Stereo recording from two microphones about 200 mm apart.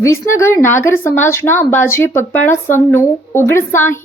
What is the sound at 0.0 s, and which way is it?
A woman's voice, 15° left (ahead or behind).